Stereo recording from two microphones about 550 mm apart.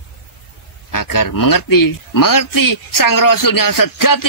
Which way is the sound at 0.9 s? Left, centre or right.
Left.